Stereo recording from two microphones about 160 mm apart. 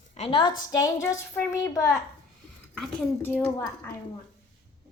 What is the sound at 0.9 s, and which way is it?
A woman's voice, 20° left (ahead or behind).